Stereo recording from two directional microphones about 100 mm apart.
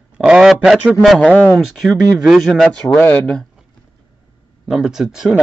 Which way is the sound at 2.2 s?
Centre (ahead or behind).